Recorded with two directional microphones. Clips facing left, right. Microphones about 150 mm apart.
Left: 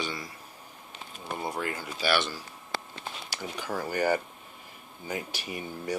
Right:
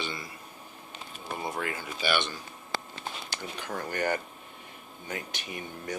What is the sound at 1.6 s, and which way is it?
Speech, 40° left (ahead or behind).